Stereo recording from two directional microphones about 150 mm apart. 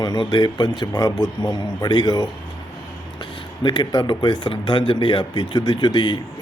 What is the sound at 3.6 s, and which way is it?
Speech, 30° left (ahead or behind).